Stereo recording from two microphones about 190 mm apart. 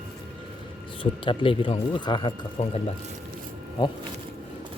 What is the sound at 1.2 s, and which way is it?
Speech, 25° left (ahead or behind).